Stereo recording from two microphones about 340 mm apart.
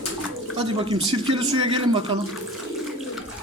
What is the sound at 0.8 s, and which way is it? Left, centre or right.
Speech, centre.